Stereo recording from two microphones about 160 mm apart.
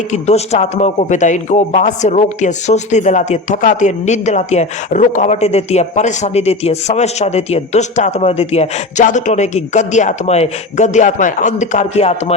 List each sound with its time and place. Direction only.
0.1 s a man's voice: 45° left (ahead or behind)